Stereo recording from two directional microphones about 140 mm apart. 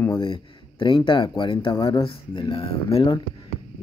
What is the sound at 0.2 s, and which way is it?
Speech, 35° left (ahead or behind).